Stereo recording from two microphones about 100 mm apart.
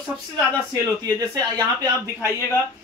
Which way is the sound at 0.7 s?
40° right (ahead or behind).